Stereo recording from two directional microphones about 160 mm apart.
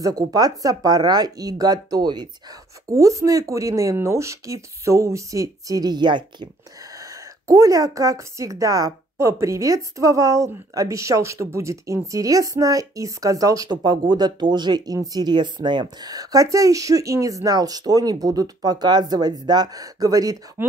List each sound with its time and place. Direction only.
0.0 s a woman's voice: 25° right (ahead or behind)